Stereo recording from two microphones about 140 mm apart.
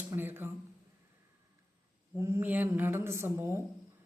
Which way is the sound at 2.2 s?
20° right (ahead or behind).